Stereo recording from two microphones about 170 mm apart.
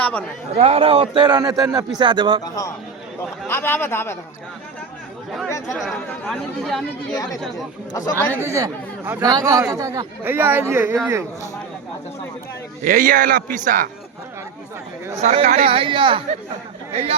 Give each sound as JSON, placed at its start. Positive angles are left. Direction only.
{"t": 0.0, "sound": "a man's voice", "side_deg": 10}
{"t": 0.5, "sound": "a man's voice", "side_deg": -40}
{"t": 2.4, "sound": "a man's voice", "side_deg": 20}
{"t": 5.7, "sound": "speech", "side_deg": 5}
{"t": 7.9, "sound": "a man's voice", "side_deg": 20}
{"t": 8.4, "sound": "a man's voice", "side_deg": -15}
{"t": 12.8, "sound": "a man's voice", "side_deg": -50}
{"t": 15.2, "sound": "a man's voice", "side_deg": -40}